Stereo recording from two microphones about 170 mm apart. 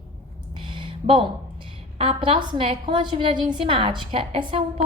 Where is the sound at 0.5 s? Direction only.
30° right (ahead or behind).